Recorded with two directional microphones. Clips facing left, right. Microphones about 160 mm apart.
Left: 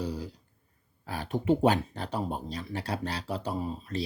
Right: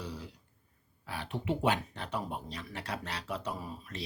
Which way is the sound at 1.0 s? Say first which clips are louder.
Left 7 dB; 40° left (ahead or behind).